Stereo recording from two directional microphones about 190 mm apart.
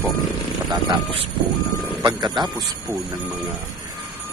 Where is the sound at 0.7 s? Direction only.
25° right (ahead or behind).